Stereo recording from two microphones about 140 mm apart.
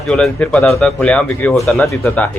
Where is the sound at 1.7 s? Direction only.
15° left (ahead or behind).